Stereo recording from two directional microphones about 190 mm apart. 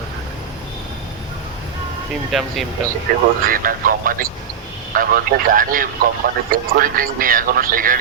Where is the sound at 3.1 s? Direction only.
55° right (ahead or behind).